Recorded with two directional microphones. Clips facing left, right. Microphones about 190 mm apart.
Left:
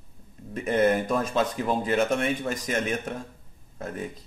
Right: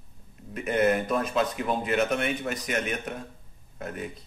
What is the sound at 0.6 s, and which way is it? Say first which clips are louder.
Speech: left 1 dB; 30° left (ahead or behind).